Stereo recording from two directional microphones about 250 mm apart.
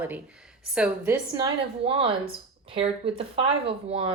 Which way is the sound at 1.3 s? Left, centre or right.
Centre.